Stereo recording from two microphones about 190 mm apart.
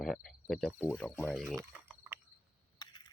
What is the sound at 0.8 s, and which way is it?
Speech, 10° left (ahead or behind).